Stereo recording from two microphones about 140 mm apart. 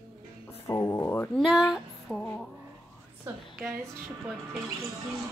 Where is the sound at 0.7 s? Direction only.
20° left (ahead or behind).